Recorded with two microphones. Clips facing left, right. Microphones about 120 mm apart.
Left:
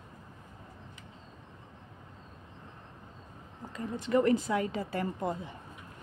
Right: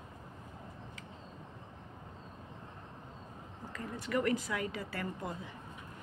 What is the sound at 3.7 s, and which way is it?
Speech, 25° left (ahead or behind).